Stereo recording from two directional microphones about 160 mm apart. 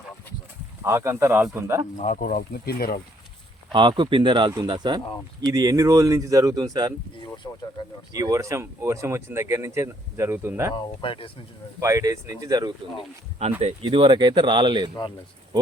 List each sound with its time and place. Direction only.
0.9 s speech: 15° right (ahead or behind)
2.0 s speech: 55° left (ahead or behind); by 3.0 s 70° left (ahead or behind)
3.7 s speech: 30° right (ahead or behind)
8.1 s speech: 20° right (ahead or behind)
10.8 s speech: 35° left (ahead or behind)
11.8 s speech: 20° right (ahead or behind)
13.6 s speech: 35° right (ahead or behind)